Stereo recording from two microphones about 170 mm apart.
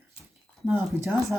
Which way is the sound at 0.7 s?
15° right (ahead or behind).